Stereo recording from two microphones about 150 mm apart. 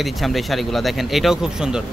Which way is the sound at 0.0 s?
Centre (ahead or behind).